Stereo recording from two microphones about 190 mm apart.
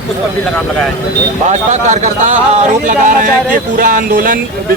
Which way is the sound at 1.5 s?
40° right (ahead or behind).